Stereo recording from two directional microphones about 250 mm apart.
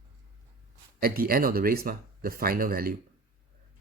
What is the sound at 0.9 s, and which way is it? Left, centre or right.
Speech, right.